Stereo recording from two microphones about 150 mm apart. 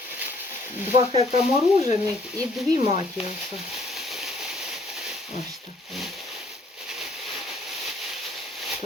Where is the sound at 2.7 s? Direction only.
50° left (ahead or behind).